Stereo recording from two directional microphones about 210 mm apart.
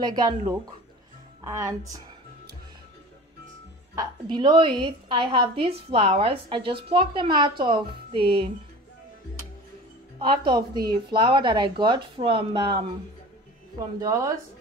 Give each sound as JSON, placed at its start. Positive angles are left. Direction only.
{"t": 0.0, "sound": "a woman's voice", "side_deg": -20}
{"t": 3.9, "sound": "a woman's voice", "side_deg": -20}
{"t": 10.1, "sound": "a woman's voice", "side_deg": -25}
{"t": 13.9, "sound": "speech", "side_deg": -15}